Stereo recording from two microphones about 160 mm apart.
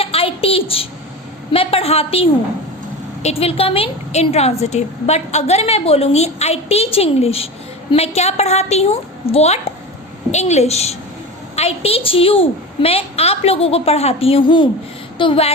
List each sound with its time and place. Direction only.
0.0 s a sound: 35° left (ahead or behind)
1.5 s a woman's voice: 35° left (ahead or behind)
3.2 s a woman's voice: 35° left (ahead or behind)